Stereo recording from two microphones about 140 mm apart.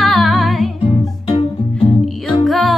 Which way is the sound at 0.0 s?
Centre (ahead or behind).